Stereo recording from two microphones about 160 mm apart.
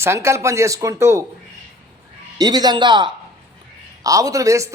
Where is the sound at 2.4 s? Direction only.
25° right (ahead or behind).